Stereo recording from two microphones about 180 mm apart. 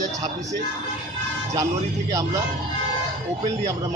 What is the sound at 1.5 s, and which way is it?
Speech, 20° right (ahead or behind).